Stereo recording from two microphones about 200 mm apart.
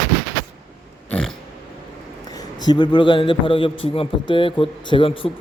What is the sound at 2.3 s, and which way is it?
A man's voice, 20° left (ahead or behind).